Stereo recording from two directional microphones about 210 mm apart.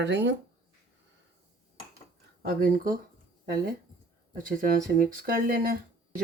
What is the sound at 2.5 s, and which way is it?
Speech, 45° right (ahead or behind).